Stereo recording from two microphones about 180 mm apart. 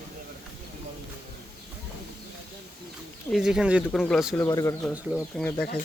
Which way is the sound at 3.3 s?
5° right (ahead or behind).